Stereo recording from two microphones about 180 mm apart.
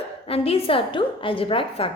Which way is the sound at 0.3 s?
35° left (ahead or behind).